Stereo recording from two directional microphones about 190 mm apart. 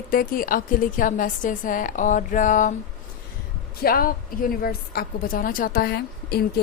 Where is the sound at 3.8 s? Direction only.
50° left (ahead or behind).